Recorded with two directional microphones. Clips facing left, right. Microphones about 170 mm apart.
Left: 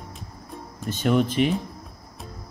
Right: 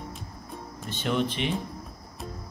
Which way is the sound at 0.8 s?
45° left (ahead or behind).